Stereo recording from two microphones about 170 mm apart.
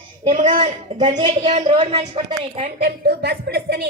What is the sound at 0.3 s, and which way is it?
A woman's voice, 45° right (ahead or behind).